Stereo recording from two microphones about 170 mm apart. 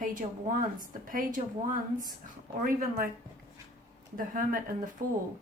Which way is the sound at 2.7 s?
60° right (ahead or behind).